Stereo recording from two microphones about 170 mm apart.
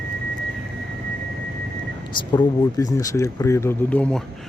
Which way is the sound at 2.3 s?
20° left (ahead or behind).